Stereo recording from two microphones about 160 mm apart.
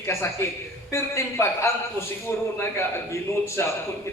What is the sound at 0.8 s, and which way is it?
A man's voice, 20° left (ahead or behind).